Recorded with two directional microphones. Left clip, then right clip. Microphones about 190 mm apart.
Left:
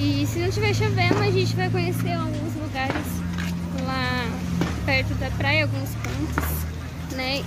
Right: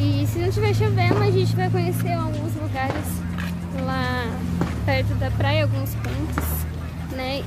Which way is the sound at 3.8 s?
10° right (ahead or behind).